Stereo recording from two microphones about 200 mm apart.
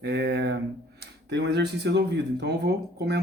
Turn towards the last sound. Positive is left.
turn(degrees=-55)  # may be behind; listen again after turning